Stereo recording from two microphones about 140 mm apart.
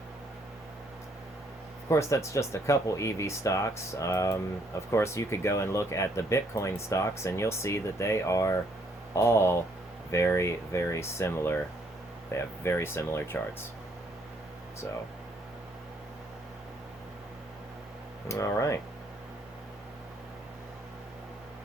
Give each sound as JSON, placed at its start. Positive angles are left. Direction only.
{"t": 1.9, "sound": "speech", "side_deg": 20}
{"t": 18.3, "sound": "speech", "side_deg": 20}